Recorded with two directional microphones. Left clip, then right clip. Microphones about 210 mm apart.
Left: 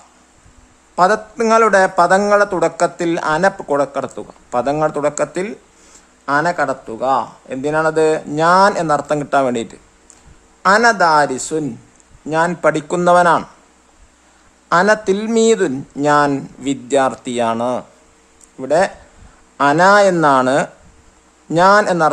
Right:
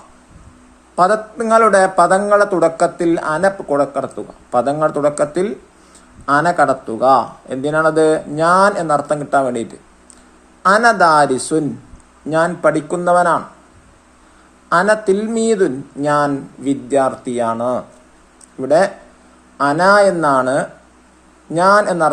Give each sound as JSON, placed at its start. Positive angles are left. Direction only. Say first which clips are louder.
{"t": 0.9, "sound": "a man's voice", "louder": "even", "side_deg": 15}
{"t": 12.5, "sound": "speech", "louder": "even", "side_deg": 20}
{"t": 14.7, "sound": "speech", "louder": "even", "side_deg": 20}
{"t": 18.6, "sound": "speech", "louder": "right 2 dB", "side_deg": 15}